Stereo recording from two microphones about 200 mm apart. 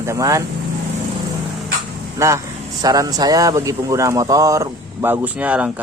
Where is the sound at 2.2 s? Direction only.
15° right (ahead or behind).